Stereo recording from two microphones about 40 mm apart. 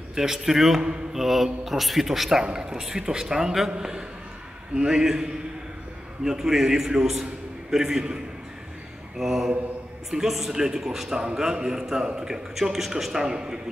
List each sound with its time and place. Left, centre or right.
0.1 s a man's voice: centre
9.2 s a man's voice: centre